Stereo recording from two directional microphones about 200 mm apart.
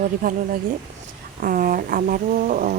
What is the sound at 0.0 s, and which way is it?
Speech, 45° right (ahead or behind).